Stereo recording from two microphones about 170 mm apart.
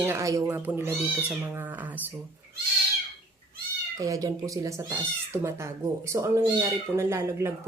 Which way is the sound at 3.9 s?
20° right (ahead or behind).